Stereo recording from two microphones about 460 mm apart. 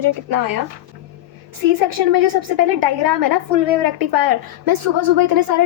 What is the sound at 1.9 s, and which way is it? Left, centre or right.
A woman's voice, right.